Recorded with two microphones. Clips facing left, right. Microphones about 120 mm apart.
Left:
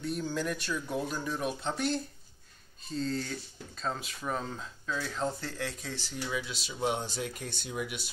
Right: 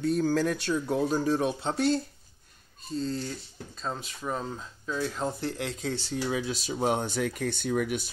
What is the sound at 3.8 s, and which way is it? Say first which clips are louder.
Speech: right 1 dB; 5° right (ahead or behind).